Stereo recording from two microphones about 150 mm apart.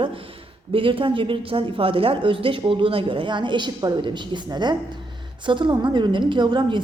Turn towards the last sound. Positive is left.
turn(degrees=-30)  # may be behind; listen again after turning